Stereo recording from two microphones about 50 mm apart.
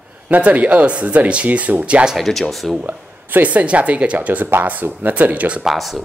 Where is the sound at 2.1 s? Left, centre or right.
Centre.